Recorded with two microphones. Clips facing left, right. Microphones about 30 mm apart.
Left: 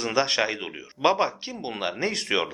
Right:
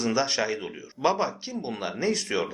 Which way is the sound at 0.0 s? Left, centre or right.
Left.